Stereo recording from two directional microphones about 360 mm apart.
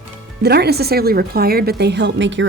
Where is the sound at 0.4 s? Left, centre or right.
Right.